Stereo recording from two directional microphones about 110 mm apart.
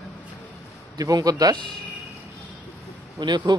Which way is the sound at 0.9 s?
35° right (ahead or behind).